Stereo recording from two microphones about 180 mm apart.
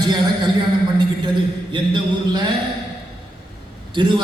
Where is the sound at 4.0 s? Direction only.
25° right (ahead or behind).